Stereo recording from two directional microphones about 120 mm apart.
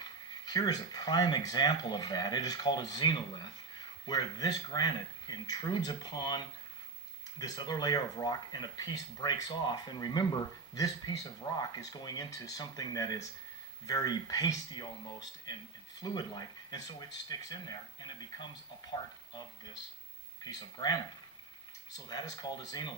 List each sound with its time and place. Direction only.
0.0 s speech: 35° left (ahead or behind)